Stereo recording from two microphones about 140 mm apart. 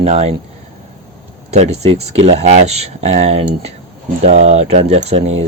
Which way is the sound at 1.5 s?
50° right (ahead or behind).